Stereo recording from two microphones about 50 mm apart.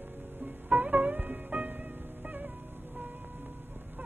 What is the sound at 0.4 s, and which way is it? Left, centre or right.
Music, right.